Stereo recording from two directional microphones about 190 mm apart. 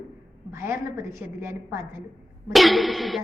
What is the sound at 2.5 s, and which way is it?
Music, centre (ahead or behind).